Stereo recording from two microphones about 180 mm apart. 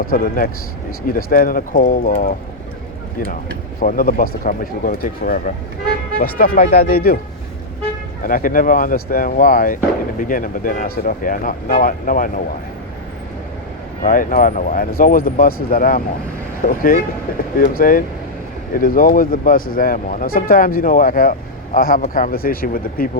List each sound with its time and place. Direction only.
0.1 s speech: 50° left (ahead or behind)
3.8 s speech: 50° left (ahead or behind)
8.2 s speech: 50° left (ahead or behind)
14.0 s speech: 50° left (ahead or behind)